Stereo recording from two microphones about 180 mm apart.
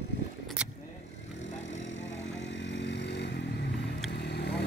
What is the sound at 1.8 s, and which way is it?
Vehicle, 80° left.